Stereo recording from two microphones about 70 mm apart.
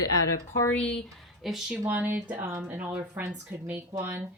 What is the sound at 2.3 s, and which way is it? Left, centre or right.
Speech, right.